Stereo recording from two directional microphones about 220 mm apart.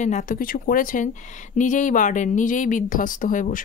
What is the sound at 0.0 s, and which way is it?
A woman's voice, 35° left (ahead or behind).